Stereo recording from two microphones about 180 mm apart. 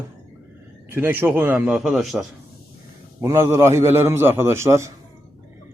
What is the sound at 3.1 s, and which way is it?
A man's voice, 15° right (ahead or behind).